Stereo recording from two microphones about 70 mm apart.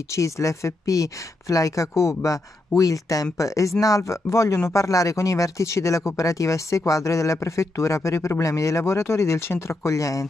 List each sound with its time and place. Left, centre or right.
0.1 s speech: left